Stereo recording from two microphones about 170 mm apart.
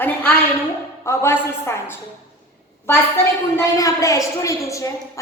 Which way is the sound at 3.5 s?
20° left (ahead or behind).